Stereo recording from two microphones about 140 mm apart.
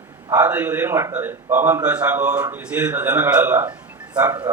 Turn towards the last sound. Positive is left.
turn(degrees=-10)  # may be behind; listen again after turning